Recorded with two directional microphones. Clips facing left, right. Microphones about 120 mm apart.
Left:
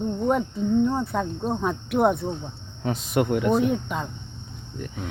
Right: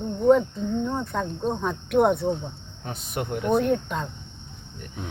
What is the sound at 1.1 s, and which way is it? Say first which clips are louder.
Cricket: left 1 dB; 5° left (ahead or behind).